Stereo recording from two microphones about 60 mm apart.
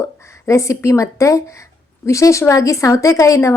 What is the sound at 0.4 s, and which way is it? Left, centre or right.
A woman's voice, left.